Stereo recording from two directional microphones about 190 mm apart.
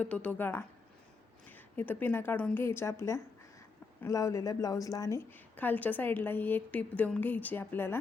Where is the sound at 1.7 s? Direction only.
10° left (ahead or behind).